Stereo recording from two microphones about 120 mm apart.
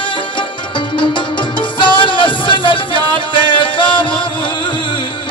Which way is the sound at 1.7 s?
40° left (ahead or behind).